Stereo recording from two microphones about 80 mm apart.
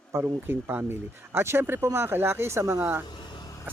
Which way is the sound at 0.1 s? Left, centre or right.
Right.